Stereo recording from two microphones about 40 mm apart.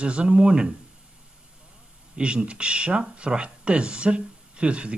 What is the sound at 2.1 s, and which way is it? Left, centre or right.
A man's voice, right.